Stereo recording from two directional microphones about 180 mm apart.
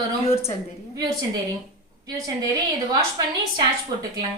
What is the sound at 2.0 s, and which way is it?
Speech, 20° right (ahead or behind).